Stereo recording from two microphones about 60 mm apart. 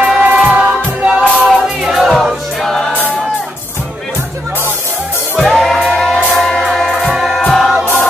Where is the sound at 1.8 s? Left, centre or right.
Centre.